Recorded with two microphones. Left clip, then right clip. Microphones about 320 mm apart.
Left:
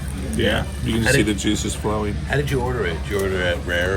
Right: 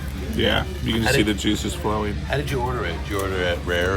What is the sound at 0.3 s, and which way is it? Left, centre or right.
Speech, centre.